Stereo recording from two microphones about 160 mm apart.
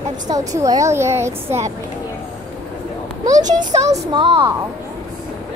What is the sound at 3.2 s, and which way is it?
A child's voice, 25° right (ahead or behind).